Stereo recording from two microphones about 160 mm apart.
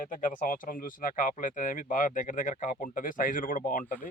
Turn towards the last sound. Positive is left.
turn(degrees=55)  # may be behind; listen again after turning